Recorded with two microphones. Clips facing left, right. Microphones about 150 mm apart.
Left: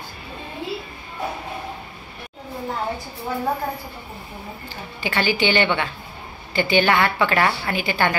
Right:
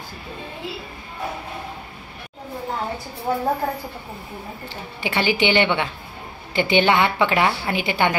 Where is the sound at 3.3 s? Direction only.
45° right (ahead or behind).